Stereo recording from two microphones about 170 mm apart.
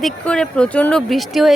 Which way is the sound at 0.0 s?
5° left (ahead or behind).